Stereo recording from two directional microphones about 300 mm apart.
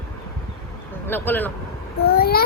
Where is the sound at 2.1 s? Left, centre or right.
Left.